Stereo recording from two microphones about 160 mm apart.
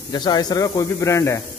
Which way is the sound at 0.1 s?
25° left (ahead or behind).